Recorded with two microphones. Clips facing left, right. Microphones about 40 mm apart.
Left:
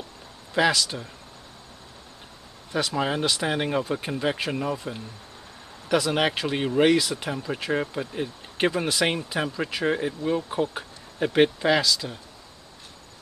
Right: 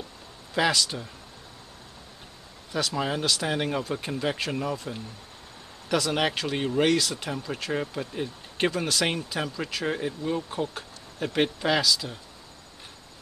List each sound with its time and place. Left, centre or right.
0.6 s speech: centre
2.7 s speech: centre